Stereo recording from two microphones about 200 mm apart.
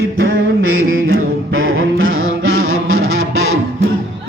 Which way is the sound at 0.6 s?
90° right.